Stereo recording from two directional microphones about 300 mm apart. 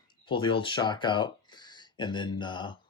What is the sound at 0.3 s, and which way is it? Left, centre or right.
Speech, centre.